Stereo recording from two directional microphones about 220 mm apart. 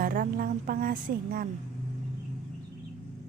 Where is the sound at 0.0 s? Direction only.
40° right (ahead or behind).